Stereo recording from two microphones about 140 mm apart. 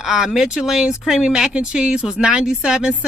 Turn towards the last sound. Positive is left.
turn(degrees=-5)  # may be behind; listen again after turning